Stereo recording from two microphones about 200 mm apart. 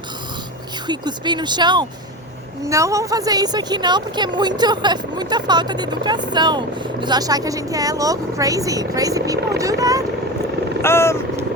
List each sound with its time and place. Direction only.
0.9 s a woman's voice: 20° right (ahead or behind)
10.8 s speech: 10° left (ahead or behind)